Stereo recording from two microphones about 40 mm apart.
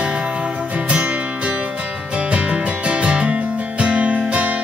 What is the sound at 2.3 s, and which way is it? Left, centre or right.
Music, right.